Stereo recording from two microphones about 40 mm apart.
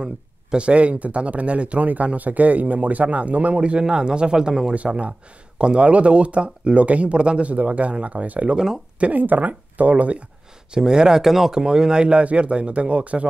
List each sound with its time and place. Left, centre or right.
0.0 s speech: right
9.0 s speech: right
10.7 s speech: centre
11.6 s speech: centre